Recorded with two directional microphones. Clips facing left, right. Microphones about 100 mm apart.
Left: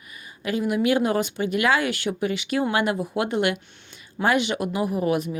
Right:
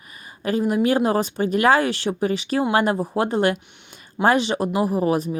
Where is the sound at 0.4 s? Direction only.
40° right (ahead or behind).